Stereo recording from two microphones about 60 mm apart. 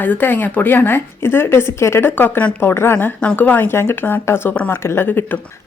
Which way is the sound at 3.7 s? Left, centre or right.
Left.